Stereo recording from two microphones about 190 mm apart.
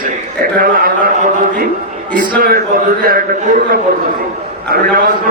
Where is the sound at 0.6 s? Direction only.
50° right (ahead or behind).